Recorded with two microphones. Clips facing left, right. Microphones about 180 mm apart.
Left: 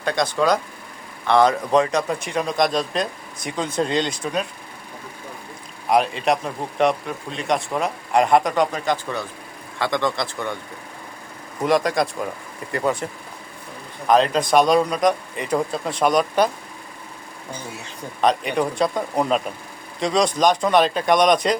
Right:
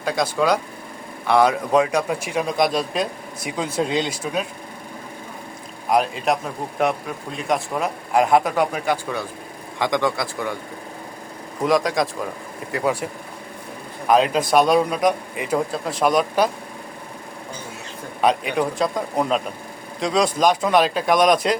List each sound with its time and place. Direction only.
0.0 s speech: 5° right (ahead or behind)
5.9 s speech: centre (ahead or behind)
11.6 s speech: centre (ahead or behind)
14.1 s speech: 5° right (ahead or behind)
18.2 s speech: 5° right (ahead or behind)